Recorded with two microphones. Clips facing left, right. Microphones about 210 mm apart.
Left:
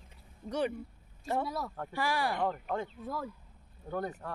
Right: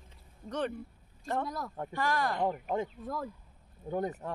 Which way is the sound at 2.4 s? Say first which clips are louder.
Right 2 dB; 15° right (ahead or behind).